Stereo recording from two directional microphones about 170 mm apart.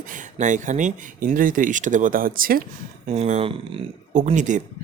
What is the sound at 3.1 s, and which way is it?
Speech, 40° right (ahead or behind).